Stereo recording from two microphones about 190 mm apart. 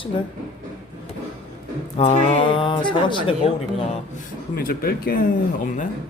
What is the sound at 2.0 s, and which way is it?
Speech, 30° left (ahead or behind).